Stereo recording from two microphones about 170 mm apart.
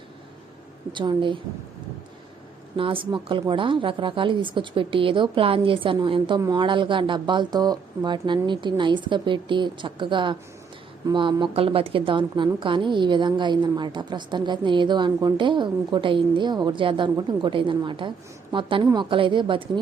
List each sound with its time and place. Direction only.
0.9 s a woman's voice: 30° right (ahead or behind)
2.7 s a woman's voice: 30° right (ahead or behind)